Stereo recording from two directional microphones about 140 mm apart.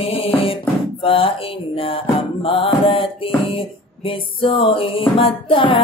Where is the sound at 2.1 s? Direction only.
40° left (ahead or behind).